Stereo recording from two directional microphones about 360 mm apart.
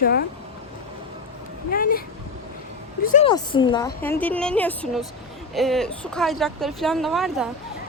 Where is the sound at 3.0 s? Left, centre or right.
Centre.